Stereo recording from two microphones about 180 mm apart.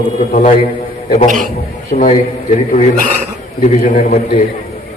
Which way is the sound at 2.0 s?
40° left (ahead or behind).